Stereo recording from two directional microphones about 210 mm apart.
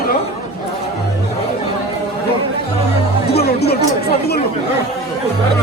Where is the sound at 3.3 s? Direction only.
50° left (ahead or behind).